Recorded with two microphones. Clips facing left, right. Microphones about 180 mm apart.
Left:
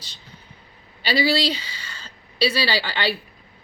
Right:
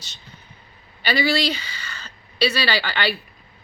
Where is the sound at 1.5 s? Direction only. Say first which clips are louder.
Even; 30° left (ahead or behind).